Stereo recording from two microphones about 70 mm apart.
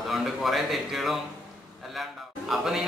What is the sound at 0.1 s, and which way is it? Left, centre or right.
A man's voice, centre.